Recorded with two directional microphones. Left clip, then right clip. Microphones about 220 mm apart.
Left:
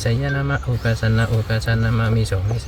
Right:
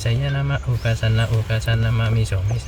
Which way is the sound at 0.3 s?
15° left (ahead or behind).